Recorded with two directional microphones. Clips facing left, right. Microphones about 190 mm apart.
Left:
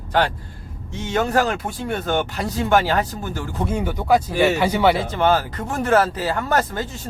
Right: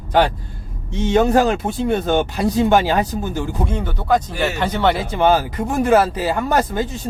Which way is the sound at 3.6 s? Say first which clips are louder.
Even; 10° left (ahead or behind).